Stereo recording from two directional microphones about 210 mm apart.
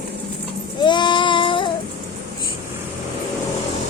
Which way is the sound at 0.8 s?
20° left (ahead or behind).